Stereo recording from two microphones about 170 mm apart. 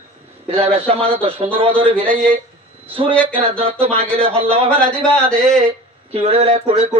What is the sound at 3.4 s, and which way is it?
Speech, 35° right (ahead or behind).